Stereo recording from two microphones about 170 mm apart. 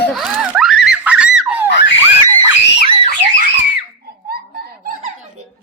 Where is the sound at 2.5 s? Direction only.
90° left.